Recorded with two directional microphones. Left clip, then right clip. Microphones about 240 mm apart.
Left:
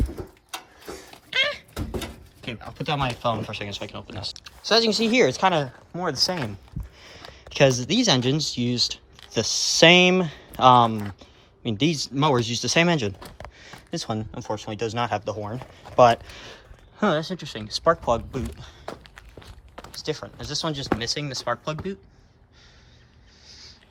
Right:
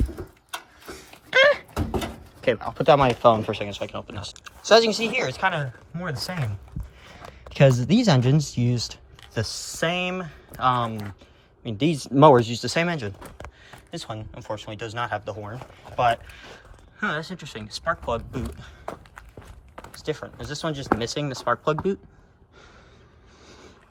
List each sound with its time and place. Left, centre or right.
0.5 s a sound: left
1.3 s door: centre
1.8 s drawer open or close: centre
2.6 s speech: centre
6.1 s speech: centre
7.5 s speech: centre
11.9 s speech: centre
13.6 s a sound: centre
14.3 s speech: centre
18.6 s walk: centre
21.0 s speech: centre